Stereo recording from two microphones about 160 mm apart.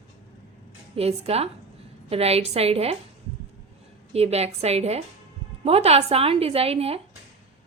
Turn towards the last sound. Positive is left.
turn(degrees=-40)  # may be behind; listen again after turning